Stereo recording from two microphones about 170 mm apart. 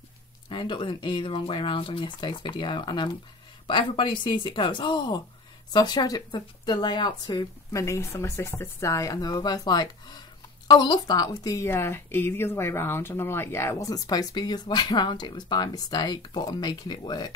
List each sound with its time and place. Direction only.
0.5 s a woman's voice: 25° left (ahead or behind)